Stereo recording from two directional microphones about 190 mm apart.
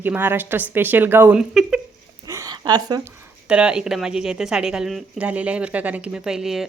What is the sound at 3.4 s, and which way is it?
A woman's voice, 5° right (ahead or behind).